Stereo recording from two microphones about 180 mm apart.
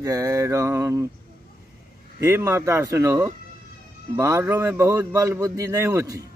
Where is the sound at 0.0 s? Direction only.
15° right (ahead or behind).